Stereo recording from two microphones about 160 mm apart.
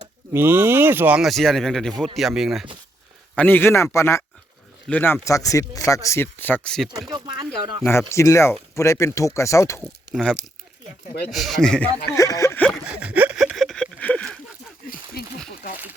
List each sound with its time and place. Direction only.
0.3 s speech: 15° right (ahead or behind)
3.3 s speech: 10° left (ahead or behind)
7.1 s speech: 25° right (ahead or behind)
8.1 s speech: 20° left (ahead or behind)
10.1 s speech: centre (ahead or behind)
12.1 s speech: 20° left (ahead or behind)
12.9 s a sound: 10° right (ahead or behind); by 14.3 s 5° left (ahead or behind)